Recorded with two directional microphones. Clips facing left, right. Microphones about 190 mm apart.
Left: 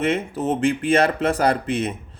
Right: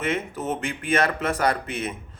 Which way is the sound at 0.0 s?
30° left (ahead or behind).